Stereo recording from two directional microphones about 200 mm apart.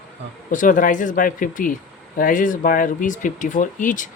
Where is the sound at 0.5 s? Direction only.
40° left (ahead or behind).